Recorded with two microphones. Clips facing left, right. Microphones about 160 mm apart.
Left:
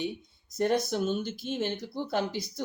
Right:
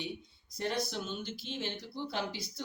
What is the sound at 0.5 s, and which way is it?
Speech, 50° left (ahead or behind).